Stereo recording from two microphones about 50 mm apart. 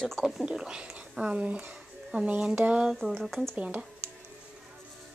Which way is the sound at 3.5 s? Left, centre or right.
Right.